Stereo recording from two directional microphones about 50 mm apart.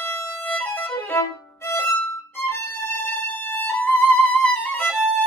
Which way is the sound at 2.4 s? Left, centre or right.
Left.